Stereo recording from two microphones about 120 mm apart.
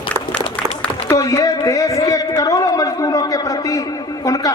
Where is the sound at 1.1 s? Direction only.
30° left (ahead or behind).